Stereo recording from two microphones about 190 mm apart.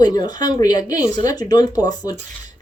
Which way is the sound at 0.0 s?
20° left (ahead or behind).